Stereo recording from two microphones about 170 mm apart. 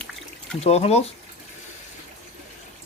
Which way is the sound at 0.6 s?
35° left (ahead or behind).